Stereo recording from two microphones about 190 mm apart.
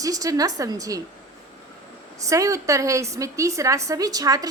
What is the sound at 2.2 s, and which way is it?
A woman's voice, 15° right (ahead or behind).